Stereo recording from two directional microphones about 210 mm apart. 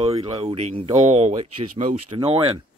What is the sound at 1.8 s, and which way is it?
Speech, 30° right (ahead or behind).